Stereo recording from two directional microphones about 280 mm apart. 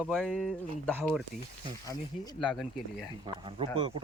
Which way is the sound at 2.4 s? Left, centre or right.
Centre.